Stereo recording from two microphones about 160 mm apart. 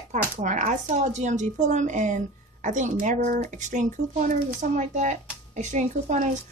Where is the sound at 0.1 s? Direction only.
50° right (ahead or behind).